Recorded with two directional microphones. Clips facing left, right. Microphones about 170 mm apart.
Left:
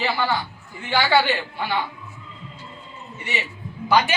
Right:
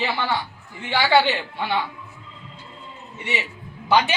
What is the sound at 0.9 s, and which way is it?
Speech, 15° right (ahead or behind).